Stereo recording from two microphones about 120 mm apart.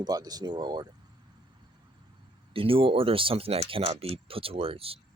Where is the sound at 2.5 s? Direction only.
50° right (ahead or behind).